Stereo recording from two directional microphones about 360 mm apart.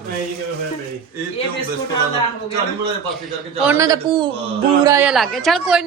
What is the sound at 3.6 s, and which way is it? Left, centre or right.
A woman's voice, centre.